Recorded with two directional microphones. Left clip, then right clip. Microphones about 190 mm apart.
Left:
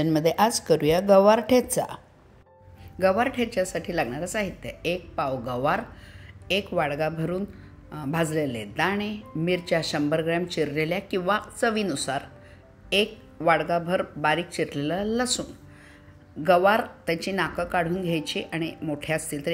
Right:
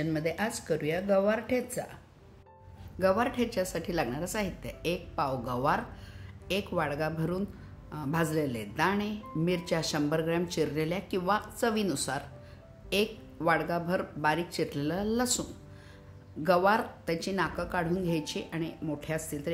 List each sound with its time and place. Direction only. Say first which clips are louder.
0.0 s speech: left 10 dB; 40° left (ahead or behind)
3.0 s a woman's voice: left 5 dB; 15° left (ahead or behind)
16.4 s speech: left 6 dB; 5° left (ahead or behind)